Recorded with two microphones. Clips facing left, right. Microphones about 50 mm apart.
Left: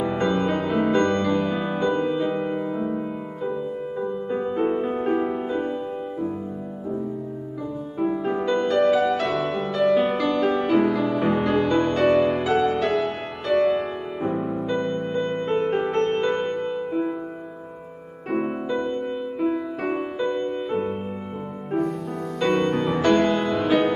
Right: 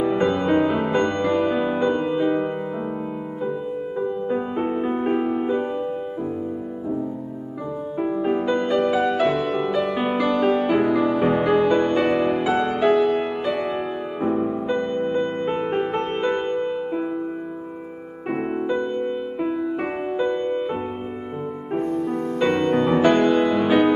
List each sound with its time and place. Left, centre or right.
0.0 s music: centre
4.1 s music: centre
8.0 s music: centre
18.3 s music: centre
21.7 s music: right
22.5 s music: centre